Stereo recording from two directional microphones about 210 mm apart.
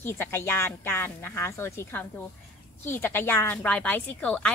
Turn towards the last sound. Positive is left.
turn(degrees=5)  # may be behind; listen again after turning